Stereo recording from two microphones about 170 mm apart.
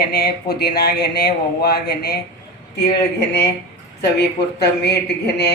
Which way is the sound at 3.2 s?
75° left (ahead or behind).